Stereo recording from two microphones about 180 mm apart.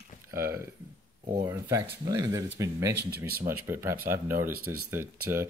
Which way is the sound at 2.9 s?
60° right (ahead or behind).